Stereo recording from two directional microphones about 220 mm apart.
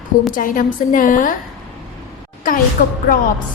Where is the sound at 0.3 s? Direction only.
35° left (ahead or behind).